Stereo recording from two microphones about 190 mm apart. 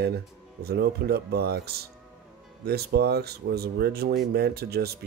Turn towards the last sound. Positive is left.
turn(degrees=-55)  # may be behind; listen again after turning